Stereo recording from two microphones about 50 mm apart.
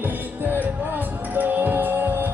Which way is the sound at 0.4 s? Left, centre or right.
Right.